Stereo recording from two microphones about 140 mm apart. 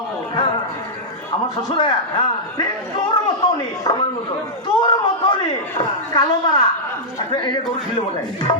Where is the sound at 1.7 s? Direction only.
35° left (ahead or behind).